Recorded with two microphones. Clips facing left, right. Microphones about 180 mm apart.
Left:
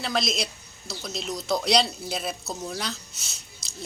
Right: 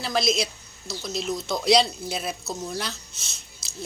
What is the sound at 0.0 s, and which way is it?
Speech, centre (ahead or behind).